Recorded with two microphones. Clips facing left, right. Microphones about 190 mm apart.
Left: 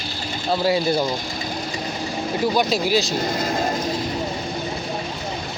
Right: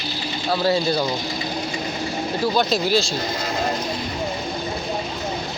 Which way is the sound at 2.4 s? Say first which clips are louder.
Even; 10° left (ahead or behind).